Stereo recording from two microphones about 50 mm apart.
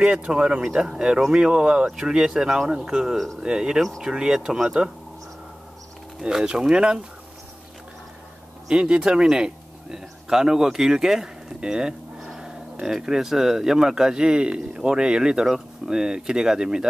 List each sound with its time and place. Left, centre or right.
0.0 s speech: right
6.2 s speech: centre
8.6 s speech: centre
12.4 s livestock: centre
13.0 s speech: centre
15.4 s speech: centre
15.9 s speech: centre